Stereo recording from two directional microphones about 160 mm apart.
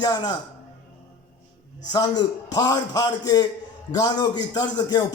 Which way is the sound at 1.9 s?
25° left (ahead or behind).